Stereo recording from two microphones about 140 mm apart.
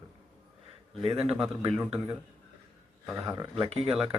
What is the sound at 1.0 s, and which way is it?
Speech, 45° right (ahead or behind).